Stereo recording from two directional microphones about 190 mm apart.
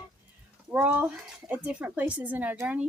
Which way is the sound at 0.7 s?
10° right (ahead or behind).